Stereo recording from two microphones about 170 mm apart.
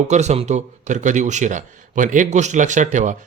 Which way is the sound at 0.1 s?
40° right (ahead or behind).